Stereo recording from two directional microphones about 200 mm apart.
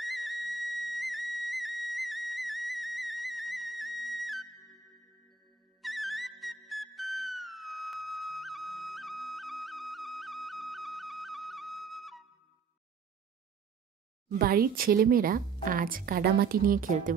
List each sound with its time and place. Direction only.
0.0 s music: centre (ahead or behind)
14.4 s a woman's voice: 45° right (ahead or behind)